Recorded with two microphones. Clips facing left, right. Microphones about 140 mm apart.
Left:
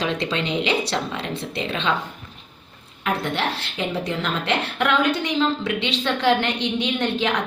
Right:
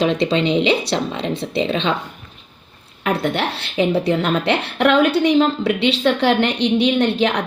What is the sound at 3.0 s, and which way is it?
Speech, 65° right (ahead or behind).